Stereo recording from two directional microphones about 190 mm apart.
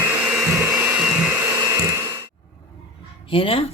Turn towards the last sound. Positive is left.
turn(degrees=30)  # may be behind; listen again after turning